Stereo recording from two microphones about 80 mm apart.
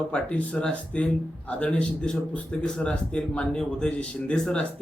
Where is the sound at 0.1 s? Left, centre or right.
Centre.